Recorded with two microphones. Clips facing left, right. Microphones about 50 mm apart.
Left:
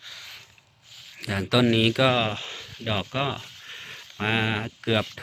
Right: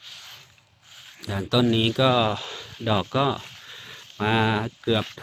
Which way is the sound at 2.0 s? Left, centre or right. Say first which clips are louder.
Right 2 dB; left.